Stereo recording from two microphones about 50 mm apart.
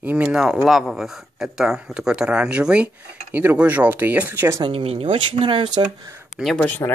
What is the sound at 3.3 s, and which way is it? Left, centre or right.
Speech, right.